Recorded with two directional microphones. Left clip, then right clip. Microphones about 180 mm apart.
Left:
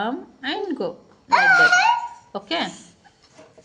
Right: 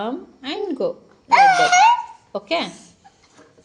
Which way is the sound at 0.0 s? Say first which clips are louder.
Left 1 dB; 5° left (ahead or behind).